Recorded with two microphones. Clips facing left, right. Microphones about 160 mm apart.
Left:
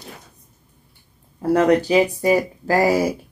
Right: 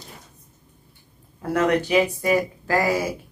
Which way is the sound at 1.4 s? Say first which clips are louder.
Left 5 dB; 30° left (ahead or behind).